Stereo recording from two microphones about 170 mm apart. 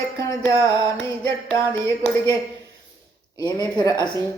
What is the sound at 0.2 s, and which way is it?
Music, 15° left (ahead or behind).